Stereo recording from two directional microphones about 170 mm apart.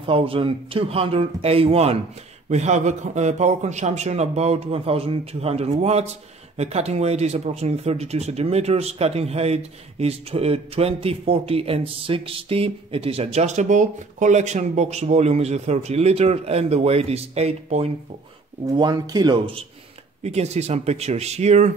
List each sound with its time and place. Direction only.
0.0 s a man's voice: 35° right (ahead or behind)
18.7 s speech: 25° right (ahead or behind)
20.2 s a man's voice: 40° right (ahead or behind)